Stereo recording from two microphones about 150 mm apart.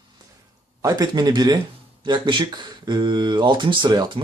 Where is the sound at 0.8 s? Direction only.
25° right (ahead or behind).